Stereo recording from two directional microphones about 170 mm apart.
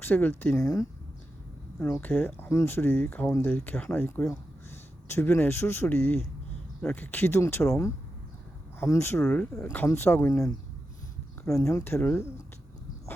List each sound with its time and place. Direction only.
0.0 s speech: 10° left (ahead or behind)